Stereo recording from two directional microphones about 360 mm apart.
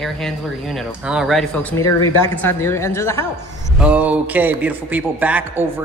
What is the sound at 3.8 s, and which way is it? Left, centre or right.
Speech, centre.